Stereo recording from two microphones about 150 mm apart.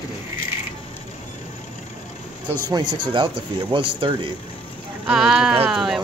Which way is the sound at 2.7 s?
35° right (ahead or behind).